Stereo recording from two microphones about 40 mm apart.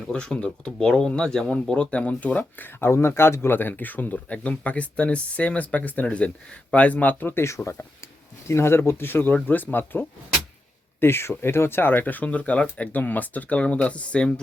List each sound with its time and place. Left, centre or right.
0.1 s speech: left
2.4 s speech: left
2.8 s speech: left
6.1 s speech: left
7.3 s speech: left
8.5 s speech: left
8.9 s speech: left
9.3 s speech: left
11.0 s speech: left